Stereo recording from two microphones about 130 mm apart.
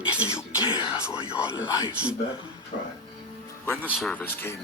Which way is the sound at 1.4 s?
25° left (ahead or behind).